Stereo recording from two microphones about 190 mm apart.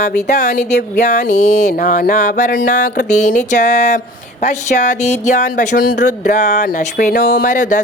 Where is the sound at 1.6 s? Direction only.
45° left (ahead or behind).